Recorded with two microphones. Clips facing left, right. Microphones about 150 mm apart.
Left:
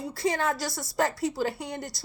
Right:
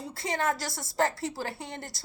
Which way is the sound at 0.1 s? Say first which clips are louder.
Left 2 dB; 20° right (ahead or behind).